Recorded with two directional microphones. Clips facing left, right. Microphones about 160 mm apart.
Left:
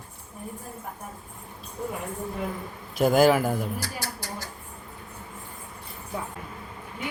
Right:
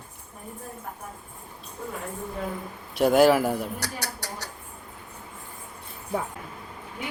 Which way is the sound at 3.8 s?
70° right (ahead or behind).